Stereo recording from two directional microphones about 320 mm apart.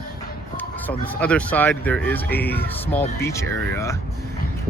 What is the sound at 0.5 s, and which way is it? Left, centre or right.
Speech, centre.